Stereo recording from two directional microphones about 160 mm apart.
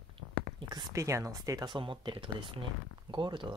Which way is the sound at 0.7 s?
20° right (ahead or behind).